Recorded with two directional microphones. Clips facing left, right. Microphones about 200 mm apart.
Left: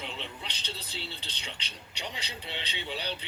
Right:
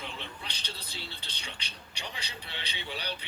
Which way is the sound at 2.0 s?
20° left (ahead or behind).